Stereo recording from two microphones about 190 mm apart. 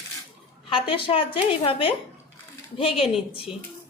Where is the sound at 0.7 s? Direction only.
30° left (ahead or behind).